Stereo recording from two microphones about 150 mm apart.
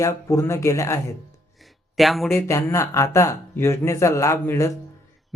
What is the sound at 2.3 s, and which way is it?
Speech, 15° left (ahead or behind).